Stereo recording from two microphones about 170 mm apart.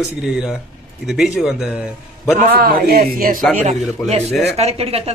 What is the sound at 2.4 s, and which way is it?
A man's voice, 55° right (ahead or behind).